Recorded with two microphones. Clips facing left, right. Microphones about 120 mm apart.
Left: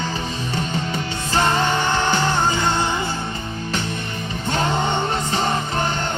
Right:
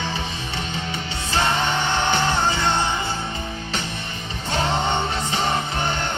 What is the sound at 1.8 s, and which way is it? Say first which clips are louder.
Music: left 2 dB; 45° left (ahead or behind).